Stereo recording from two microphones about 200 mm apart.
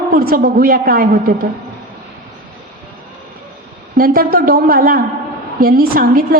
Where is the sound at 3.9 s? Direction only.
45° right (ahead or behind).